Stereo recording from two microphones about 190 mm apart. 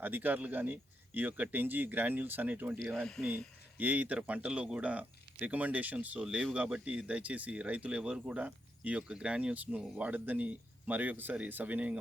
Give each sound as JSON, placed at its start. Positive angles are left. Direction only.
{"t": 0.0, "sound": "speech", "side_deg": -10}
{"t": 2.7, "sound": "speech", "side_deg": 0}
{"t": 3.8, "sound": "speech", "side_deg": -10}